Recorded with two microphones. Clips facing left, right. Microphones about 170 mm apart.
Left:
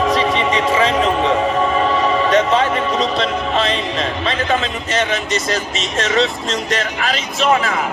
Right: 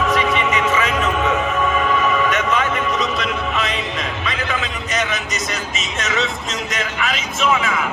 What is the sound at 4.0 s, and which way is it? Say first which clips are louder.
A man's voice: left 5 dB; 30° left (ahead or behind).